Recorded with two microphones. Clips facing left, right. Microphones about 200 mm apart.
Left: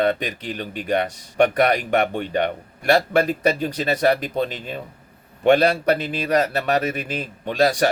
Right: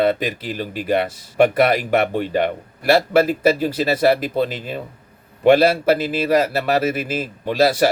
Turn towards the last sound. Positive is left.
turn(degrees=-5)  # may be behind; listen again after turning